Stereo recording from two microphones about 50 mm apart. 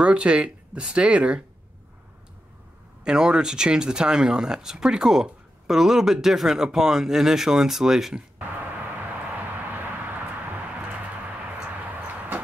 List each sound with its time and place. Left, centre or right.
0.0 s speech: right
3.0 s speech: centre
8.4 s vehicle: right